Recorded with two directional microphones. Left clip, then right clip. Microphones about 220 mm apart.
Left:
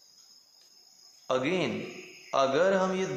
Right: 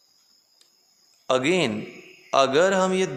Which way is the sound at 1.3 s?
55° right (ahead or behind).